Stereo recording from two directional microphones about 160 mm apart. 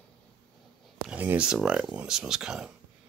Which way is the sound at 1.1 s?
10° right (ahead or behind).